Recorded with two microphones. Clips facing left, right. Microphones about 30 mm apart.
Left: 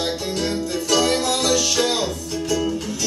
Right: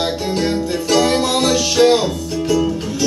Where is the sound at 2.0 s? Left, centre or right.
Centre.